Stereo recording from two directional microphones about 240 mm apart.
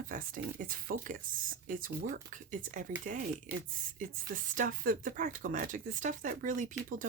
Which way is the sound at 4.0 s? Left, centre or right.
Right.